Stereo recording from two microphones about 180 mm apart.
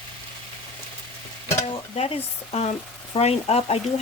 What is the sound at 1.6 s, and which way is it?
Stir, 35° left (ahead or behind).